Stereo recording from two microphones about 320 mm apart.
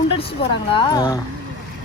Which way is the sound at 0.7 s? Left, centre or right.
Centre.